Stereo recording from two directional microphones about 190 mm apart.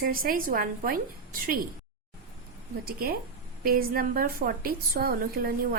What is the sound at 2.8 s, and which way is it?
A woman's voice, 50° right (ahead or behind).